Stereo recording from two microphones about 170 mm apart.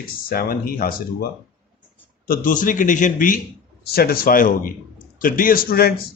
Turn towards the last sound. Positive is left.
turn(degrees=60)  # may be behind; listen again after turning